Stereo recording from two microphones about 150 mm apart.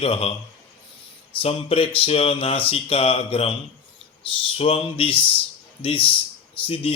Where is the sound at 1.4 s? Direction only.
40° left (ahead or behind).